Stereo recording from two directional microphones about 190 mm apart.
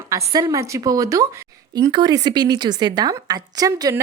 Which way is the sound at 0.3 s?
20° right (ahead or behind).